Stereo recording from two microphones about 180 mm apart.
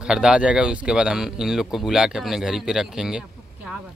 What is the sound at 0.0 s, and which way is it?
Speech, 5° right (ahead or behind).